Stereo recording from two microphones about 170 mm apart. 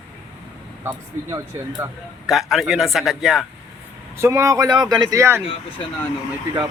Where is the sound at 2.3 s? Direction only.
Centre (ahead or behind).